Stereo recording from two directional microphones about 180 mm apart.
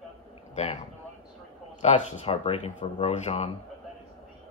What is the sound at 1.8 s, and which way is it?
Speech, 40° left (ahead or behind).